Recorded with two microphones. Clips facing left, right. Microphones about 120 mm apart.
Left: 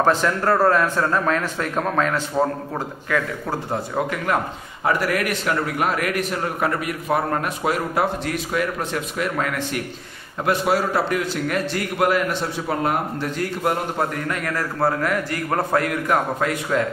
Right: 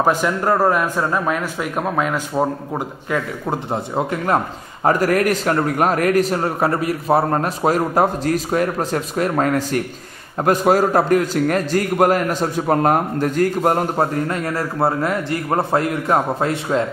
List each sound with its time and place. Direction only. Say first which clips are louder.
0.0 s a man's voice: right 1 dB; 15° right (ahead or behind)
4.8 s a man's voice: right 5 dB; 40° right (ahead or behind)